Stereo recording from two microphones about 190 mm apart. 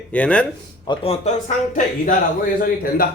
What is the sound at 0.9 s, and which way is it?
Speech, 30° left (ahead or behind).